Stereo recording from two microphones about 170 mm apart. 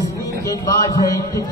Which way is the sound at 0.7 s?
20° left (ahead or behind).